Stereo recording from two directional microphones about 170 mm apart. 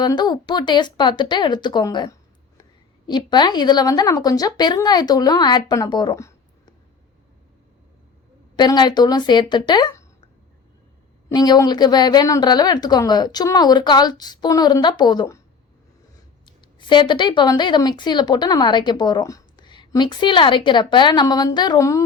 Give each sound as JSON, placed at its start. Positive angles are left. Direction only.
{"t": 0.0, "sound": "a woman's voice", "side_deg": 25}
{"t": 8.5, "sound": "a woman's voice", "side_deg": 25}
{"t": 11.3, "sound": "a woman's voice", "side_deg": 20}